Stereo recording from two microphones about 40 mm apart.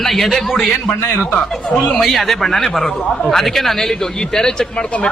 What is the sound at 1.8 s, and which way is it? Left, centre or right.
A man's voice, centre.